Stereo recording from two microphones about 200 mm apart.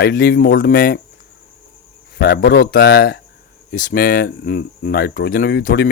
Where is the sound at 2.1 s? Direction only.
55° left (ahead or behind).